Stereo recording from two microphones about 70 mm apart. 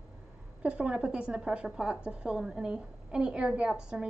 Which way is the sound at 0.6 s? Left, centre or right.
Centre.